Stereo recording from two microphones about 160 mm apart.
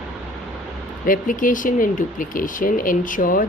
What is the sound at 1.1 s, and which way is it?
Speech, 55° left (ahead or behind).